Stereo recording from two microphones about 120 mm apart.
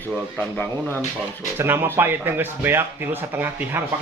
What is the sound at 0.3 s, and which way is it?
Speech, 15° left (ahead or behind).